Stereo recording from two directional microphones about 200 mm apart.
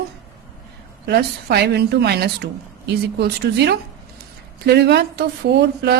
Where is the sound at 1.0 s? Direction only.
55° right (ahead or behind).